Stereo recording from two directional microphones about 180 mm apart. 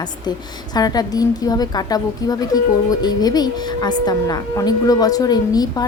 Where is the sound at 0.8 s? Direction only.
20° left (ahead or behind).